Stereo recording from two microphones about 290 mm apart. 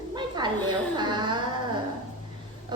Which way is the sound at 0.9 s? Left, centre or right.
Centre.